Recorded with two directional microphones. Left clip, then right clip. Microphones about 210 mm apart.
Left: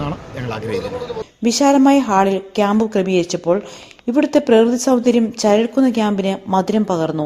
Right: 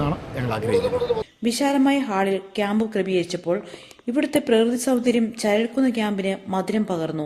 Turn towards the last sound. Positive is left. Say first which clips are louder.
# left 7 dB
turn(degrees=25)  # may be behind; listen again after turning